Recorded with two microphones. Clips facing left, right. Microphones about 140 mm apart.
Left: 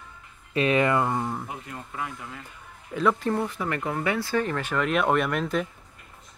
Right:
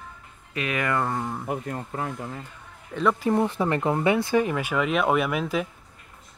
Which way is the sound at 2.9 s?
Centre (ahead or behind).